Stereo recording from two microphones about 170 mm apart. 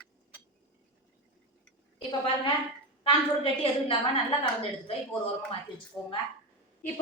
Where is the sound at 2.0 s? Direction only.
30° left (ahead or behind).